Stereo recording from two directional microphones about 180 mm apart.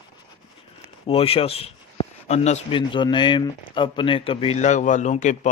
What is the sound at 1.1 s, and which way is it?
A man's voice, 30° left (ahead or behind).